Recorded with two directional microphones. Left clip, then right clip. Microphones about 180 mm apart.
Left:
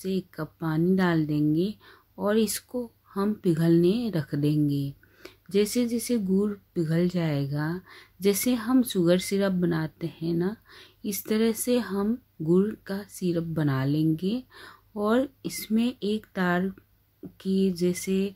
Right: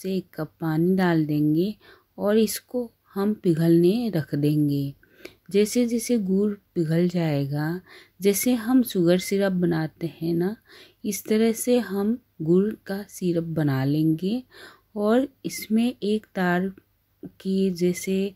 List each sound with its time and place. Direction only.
0.0 s speech: 20° right (ahead or behind)